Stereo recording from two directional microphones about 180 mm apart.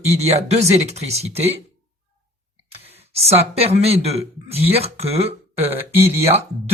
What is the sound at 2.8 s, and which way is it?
Speech, 35° right (ahead or behind).